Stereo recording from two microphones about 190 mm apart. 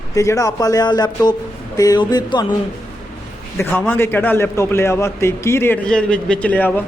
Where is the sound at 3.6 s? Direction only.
10° left (ahead or behind).